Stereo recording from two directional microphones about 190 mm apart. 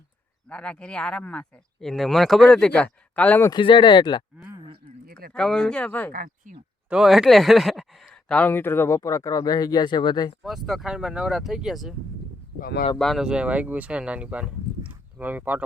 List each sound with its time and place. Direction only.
0.4 s speech: 5° left (ahead or behind)
3.5 s speech: 25° left (ahead or behind)
5.3 s speech: 5° left (ahead or behind)
6.1 s speech: 45° right (ahead or behind)
6.9 s speech: centre (ahead or behind); by 10.3 s 25° left (ahead or behind)
10.4 s speech: centre (ahead or behind)
12.5 s speech: 50° left (ahead or behind)
13.0 s speech: centre (ahead or behind)